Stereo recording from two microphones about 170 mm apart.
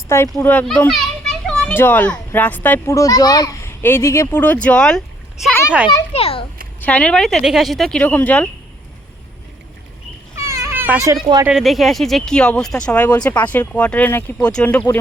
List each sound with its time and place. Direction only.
0.1 s a child's voice: 15° left (ahead or behind)
6.1 s a child's voice: 35° left (ahead or behind)
6.8 s speech: 10° left (ahead or behind)
10.3 s baby cry: 15° right (ahead or behind)
11.4 s speech: centre (ahead or behind)